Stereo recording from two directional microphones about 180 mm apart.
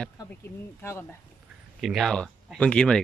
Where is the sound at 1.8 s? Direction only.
Centre (ahead or behind).